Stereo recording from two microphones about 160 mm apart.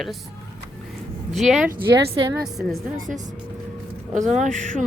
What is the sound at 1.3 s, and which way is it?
Speech, centre (ahead or behind).